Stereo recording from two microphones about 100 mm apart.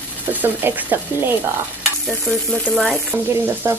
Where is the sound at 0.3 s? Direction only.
20° right (ahead or behind).